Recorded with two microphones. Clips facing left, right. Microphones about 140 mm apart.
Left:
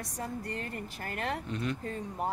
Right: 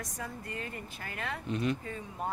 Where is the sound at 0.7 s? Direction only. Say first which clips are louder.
Left 4 dB; 45° left (ahead or behind).